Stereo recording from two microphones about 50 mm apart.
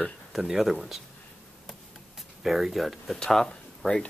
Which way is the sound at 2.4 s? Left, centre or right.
Centre.